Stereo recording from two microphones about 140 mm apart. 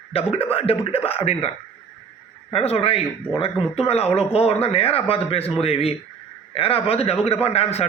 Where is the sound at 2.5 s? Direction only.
45° left (ahead or behind).